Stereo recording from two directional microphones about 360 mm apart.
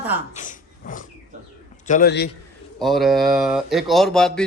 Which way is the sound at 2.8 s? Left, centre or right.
Centre.